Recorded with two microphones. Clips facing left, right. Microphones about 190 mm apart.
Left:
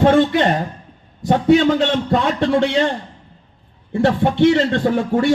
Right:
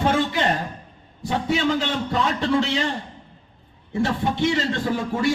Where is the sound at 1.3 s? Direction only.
60° left (ahead or behind).